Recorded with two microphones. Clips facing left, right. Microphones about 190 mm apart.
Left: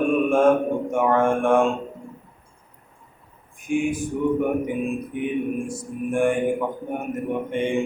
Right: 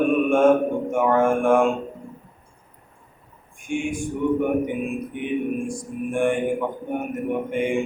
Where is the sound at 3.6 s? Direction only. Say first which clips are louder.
Left 3 dB; 5° left (ahead or behind).